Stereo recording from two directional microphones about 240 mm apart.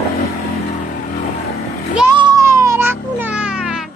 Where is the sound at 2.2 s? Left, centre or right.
Centre.